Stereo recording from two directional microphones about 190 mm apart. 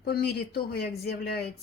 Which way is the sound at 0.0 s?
55° left (ahead or behind).